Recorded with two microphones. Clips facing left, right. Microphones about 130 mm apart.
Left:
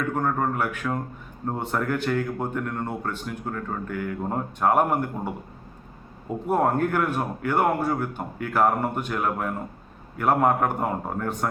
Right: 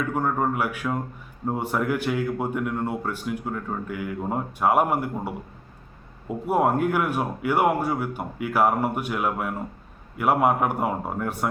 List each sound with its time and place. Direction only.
0.1 s speech: 5° right (ahead or behind)
6.5 s speech: 10° right (ahead or behind)